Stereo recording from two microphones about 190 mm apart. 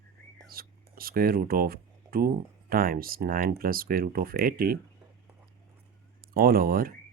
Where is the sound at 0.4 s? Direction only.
50° right (ahead or behind).